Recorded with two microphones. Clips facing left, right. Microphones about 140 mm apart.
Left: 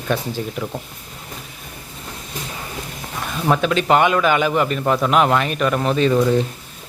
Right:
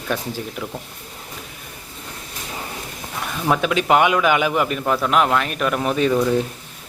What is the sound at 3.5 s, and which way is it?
A man's voice, 5° right (ahead or behind).